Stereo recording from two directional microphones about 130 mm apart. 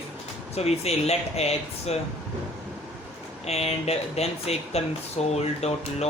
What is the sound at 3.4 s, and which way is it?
Speech, 55° left (ahead or behind).